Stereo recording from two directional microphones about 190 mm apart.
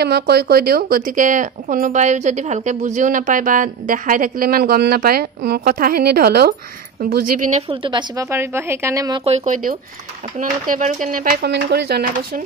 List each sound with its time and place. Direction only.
0.0 s speech: 55° right (ahead or behind)
7.5 s a woman's voice: 30° right (ahead or behind)
9.2 s speech: 35° right (ahead or behind); by 12.0 s 60° right (ahead or behind)